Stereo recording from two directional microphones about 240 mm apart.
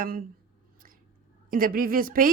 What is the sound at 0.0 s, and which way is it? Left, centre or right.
Speech, right.